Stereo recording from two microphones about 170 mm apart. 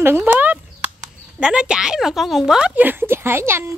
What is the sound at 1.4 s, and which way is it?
Speech, 5° right (ahead or behind).